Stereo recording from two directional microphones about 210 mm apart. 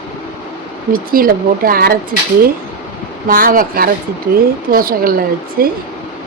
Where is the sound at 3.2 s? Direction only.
40° right (ahead or behind).